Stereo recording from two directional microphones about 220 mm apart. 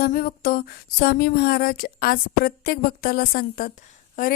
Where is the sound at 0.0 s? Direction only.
40° left (ahead or behind).